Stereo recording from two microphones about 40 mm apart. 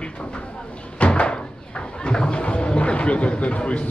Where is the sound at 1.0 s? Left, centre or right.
Left.